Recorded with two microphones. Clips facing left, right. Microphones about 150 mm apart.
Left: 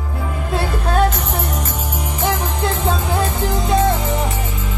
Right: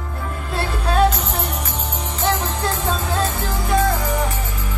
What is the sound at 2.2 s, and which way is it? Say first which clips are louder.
Music: left 1 dB; 15° left (ahead or behind).